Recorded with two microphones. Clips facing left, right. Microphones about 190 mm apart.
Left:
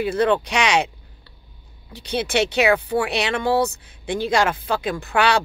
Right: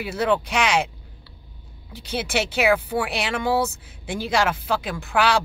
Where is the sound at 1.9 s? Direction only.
5° right (ahead or behind).